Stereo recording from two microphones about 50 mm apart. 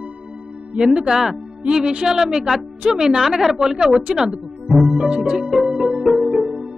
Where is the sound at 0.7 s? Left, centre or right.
Centre.